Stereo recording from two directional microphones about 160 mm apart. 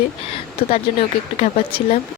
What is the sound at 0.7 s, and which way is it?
Speech, 40° left (ahead or behind).